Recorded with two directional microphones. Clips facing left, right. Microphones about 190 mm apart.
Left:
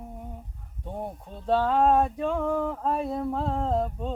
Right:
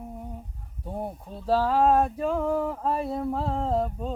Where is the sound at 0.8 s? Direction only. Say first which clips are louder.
Right 1 dB; 5° right (ahead or behind).